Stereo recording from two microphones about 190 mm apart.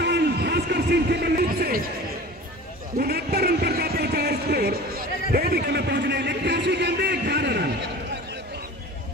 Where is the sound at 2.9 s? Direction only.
55° right (ahead or behind).